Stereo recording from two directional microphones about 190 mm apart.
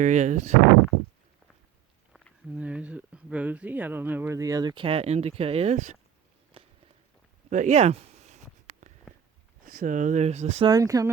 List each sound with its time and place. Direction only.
0.0 s speech: 40° right (ahead or behind)
2.1 s speech: 5° right (ahead or behind); by 6.0 s 40° right (ahead or behind)
7.5 s a sound: 40° right (ahead or behind)
9.1 s a sound: centre (ahead or behind)
9.6 s speech: 45° right (ahead or behind)
10.7 s speech: 20° right (ahead or behind)